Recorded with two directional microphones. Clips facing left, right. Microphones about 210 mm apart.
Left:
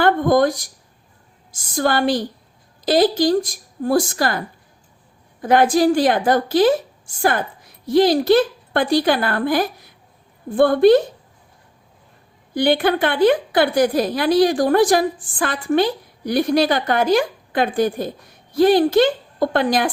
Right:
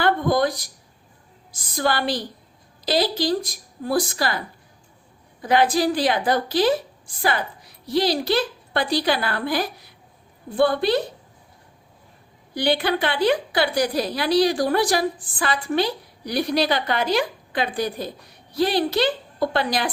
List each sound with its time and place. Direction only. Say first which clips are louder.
0.0 s a sound: left 5 dB; 50° left (ahead or behind)
1.5 s a woman's voice: left 4 dB; 50° left (ahead or behind)
12.5 s a woman's voice: left 5 dB; 50° left (ahead or behind)